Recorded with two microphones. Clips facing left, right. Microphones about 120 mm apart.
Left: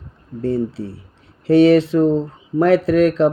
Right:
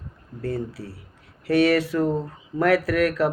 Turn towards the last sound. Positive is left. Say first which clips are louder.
# left 7 dB
turn(degrees=25)  # may be behind; listen again after turning